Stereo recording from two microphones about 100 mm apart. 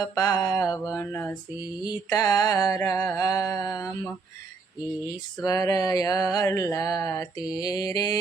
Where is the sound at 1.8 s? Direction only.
40° left (ahead or behind).